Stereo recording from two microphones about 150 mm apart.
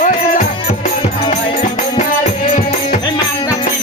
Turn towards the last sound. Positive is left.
turn(degrees=55)  # may be behind; listen again after turning